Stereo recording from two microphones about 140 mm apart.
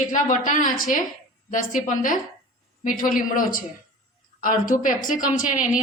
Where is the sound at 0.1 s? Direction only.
65° left (ahead or behind).